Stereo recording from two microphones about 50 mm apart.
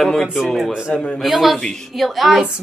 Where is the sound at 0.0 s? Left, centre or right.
Centre.